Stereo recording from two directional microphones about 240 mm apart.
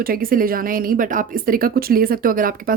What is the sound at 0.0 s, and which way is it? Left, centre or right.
Speech, right.